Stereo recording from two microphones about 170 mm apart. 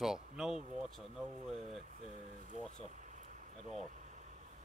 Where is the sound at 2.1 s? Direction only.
45° right (ahead or behind).